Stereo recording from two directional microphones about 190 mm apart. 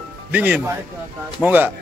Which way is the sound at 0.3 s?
10° right (ahead or behind).